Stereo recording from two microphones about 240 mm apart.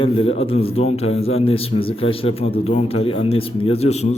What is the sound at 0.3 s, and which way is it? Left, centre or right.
A man's voice, left.